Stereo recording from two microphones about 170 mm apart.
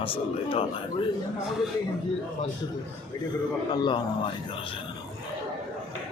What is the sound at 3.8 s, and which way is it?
Speech, 30° left (ahead or behind).